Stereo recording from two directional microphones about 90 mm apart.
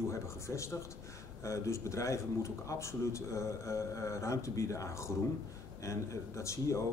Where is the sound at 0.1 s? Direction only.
35° left (ahead or behind).